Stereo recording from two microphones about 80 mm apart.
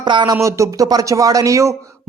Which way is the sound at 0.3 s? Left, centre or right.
Right.